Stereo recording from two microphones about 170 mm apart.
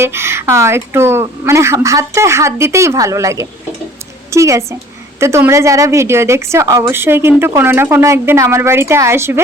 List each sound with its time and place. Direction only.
0.0 s a woman's voice: 15° right (ahead or behind)